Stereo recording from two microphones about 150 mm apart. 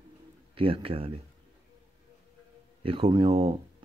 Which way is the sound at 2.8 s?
35° right (ahead or behind).